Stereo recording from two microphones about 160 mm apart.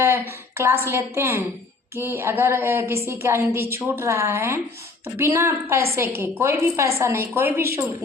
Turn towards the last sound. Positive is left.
turn(degrees=-15)  # may be behind; listen again after turning